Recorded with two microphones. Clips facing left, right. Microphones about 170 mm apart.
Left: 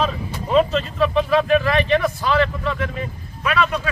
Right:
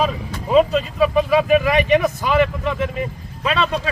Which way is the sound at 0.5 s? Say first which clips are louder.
Right 2 dB; 5° right (ahead or behind).